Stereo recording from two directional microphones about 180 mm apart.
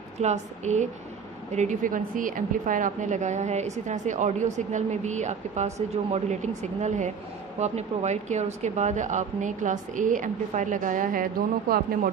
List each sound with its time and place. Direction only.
0.2 s a woman's voice: 40° right (ahead or behind)